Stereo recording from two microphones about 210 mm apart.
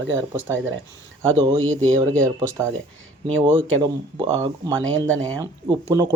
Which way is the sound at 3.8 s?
25° right (ahead or behind).